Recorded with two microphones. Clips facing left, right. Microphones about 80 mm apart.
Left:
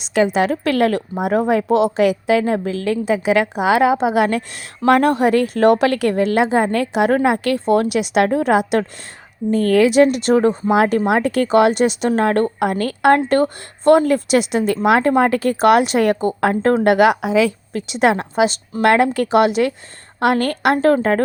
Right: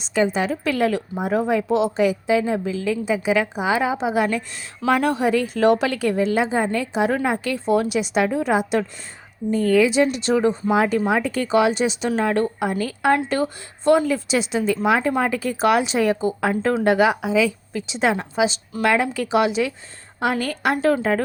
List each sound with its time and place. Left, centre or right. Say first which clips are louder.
0.0 s a woman's voice: left 4 dB; left
4.9 s a woman's voice: left 5 dB; left
13.1 s a woman's voice: left 6 dB; left